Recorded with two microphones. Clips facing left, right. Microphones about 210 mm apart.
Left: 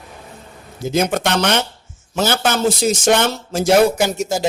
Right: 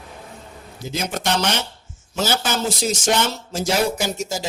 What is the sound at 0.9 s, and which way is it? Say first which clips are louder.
A man's voice: left 6 dB; 55° left (ahead or behind).